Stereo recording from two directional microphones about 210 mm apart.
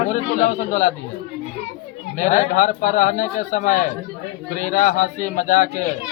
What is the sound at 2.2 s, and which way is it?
A man's voice, 35° left (ahead or behind).